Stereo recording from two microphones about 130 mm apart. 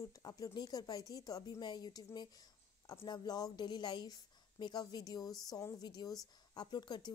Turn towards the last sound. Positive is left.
turn(degrees=35)  # may be behind; listen again after turning